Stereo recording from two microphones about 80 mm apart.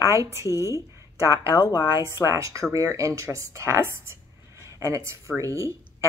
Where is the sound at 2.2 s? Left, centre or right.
Right.